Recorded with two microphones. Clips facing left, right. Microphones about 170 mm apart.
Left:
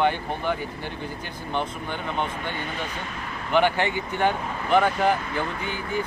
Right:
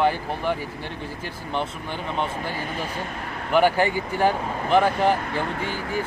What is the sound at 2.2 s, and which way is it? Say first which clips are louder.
Speech: right 2 dB; 35° right (ahead or behind).